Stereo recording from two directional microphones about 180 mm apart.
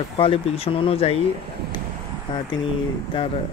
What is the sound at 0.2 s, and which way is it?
Speech, 30° left (ahead or behind).